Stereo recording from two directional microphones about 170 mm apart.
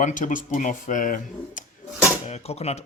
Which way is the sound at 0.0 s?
50° left (ahead or behind).